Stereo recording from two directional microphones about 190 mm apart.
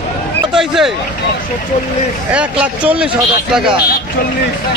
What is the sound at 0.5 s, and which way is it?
Speech, centre (ahead or behind).